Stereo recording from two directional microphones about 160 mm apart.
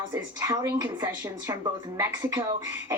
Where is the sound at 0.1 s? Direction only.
20° right (ahead or behind).